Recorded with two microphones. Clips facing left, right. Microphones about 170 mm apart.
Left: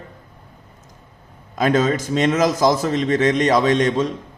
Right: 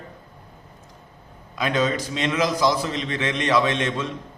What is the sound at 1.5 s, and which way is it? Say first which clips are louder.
A man's voice: left 5 dB; 45° left (ahead or behind).